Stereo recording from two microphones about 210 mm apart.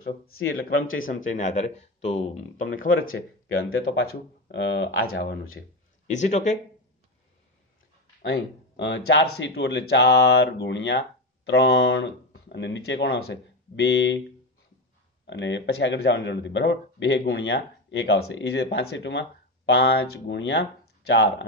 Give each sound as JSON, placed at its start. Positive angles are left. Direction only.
{"t": 0.4, "sound": "speech", "side_deg": 70}
{"t": 0.9, "sound": "speech", "side_deg": 40}
{"t": 3.1, "sound": "speech", "side_deg": 70}
{"t": 3.8, "sound": "speech", "side_deg": 50}
{"t": 5.1, "sound": "speech", "side_deg": 50}
{"t": 6.0, "sound": "speech", "side_deg": 35}
{"t": 8.2, "sound": "speech", "side_deg": 55}
{"t": 15.2, "sound": "speech", "side_deg": 60}